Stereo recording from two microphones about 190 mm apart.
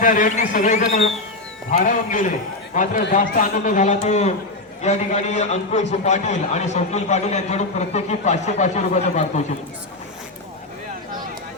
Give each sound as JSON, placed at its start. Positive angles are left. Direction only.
{"t": 0.0, "sound": "a man's voice", "side_deg": 45}